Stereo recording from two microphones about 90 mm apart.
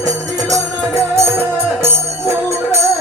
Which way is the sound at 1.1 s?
30° right (ahead or behind).